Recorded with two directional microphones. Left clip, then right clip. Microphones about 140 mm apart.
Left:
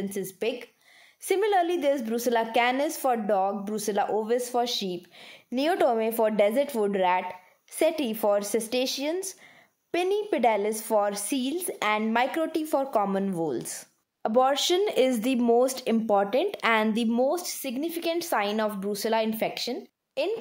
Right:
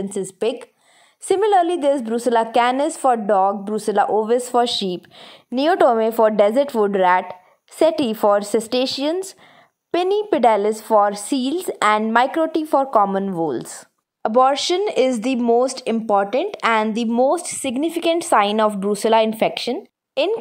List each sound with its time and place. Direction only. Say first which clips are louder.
0.1 s a woman's voice: right 9 dB; 40° right (ahead or behind)
5.2 s a woman's voice: right 8 dB; 30° right (ahead or behind)
17.2 s speech: right 11 dB; 50° right (ahead or behind)